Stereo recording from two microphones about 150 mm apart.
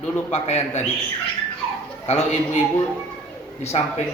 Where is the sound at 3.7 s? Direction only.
45° left (ahead or behind).